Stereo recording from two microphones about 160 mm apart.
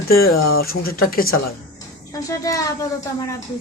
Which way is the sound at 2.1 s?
20° left (ahead or behind).